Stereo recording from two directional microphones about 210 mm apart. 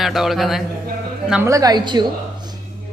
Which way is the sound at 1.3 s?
10° right (ahead or behind).